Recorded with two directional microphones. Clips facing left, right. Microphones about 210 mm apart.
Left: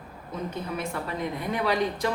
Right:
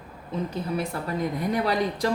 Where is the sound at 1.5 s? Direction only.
40° right (ahead or behind).